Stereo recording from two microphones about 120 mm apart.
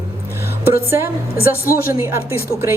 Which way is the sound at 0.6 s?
20° right (ahead or behind).